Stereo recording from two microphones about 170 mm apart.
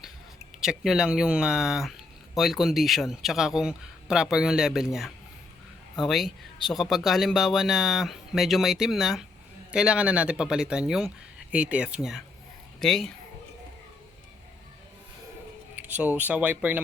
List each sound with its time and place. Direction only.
0.6 s speech: 5° right (ahead or behind)
6.0 s speech: centre (ahead or behind)
15.7 s speech: 10° right (ahead or behind)